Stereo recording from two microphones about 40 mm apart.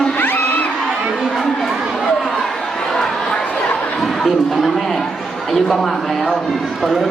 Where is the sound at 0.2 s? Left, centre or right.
Left.